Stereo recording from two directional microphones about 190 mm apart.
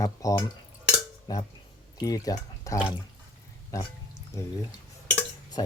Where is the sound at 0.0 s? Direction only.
20° left (ahead or behind).